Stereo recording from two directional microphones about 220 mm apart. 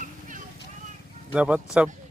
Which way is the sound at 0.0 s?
35° right (ahead or behind).